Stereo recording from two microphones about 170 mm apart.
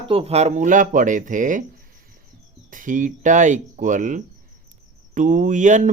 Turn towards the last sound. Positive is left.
turn(degrees=-45)  # may be behind; listen again after turning